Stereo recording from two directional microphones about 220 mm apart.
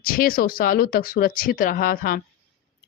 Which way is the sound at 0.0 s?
40° left (ahead or behind).